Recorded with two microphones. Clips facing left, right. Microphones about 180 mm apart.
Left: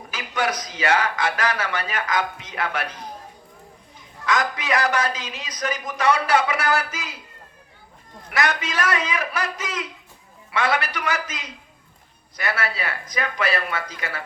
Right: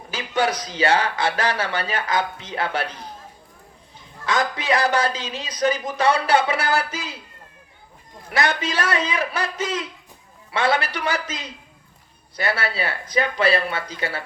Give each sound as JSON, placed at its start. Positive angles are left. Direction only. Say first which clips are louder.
{"t": 0.1, "sound": "speech", "louder": "right 3 dB", "side_deg": -30}
{"t": 4.3, "sound": "speech", "louder": "right 1 dB", "side_deg": -30}
{"t": 8.3, "sound": "speech", "louder": "right 2 dB", "side_deg": -30}